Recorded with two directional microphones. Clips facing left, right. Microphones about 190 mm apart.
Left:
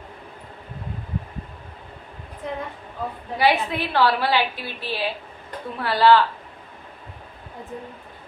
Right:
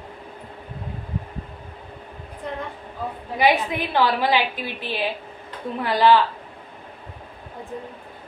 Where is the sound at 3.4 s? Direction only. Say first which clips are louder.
Right 1 dB; 15° right (ahead or behind).